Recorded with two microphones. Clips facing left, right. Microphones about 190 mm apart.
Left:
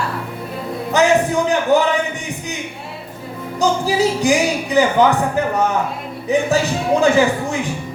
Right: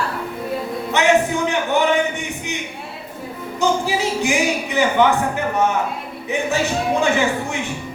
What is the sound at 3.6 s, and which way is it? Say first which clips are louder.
Music: left 3 dB; 35° left (ahead or behind).